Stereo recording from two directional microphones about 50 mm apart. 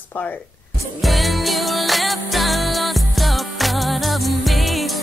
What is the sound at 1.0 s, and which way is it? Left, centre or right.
Music, centre.